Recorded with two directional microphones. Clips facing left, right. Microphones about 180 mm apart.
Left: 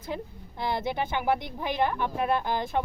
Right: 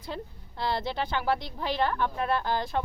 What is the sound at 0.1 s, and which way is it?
Speech, 15° left (ahead or behind).